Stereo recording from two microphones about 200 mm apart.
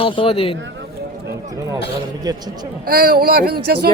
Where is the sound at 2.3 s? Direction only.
20° right (ahead or behind).